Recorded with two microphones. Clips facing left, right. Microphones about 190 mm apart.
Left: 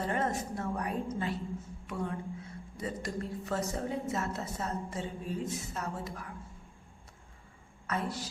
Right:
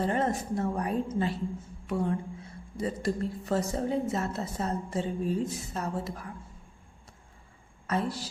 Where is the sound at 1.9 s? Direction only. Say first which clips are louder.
Right 6 dB; 30° right (ahead or behind).